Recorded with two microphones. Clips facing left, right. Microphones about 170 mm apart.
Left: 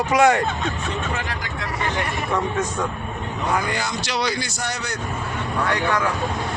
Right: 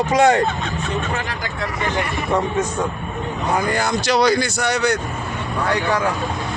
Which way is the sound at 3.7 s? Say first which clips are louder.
Right 7 dB; 50° right (ahead or behind).